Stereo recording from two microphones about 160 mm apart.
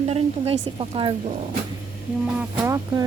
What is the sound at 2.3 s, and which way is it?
Speech, 15° right (ahead or behind).